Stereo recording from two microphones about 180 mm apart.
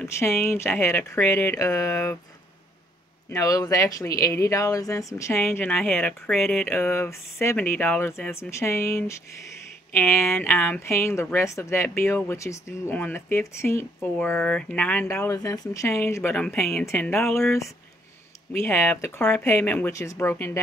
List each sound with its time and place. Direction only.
0.2 s speech: 15° left (ahead or behind)
3.3 s speech: 20° left (ahead or behind)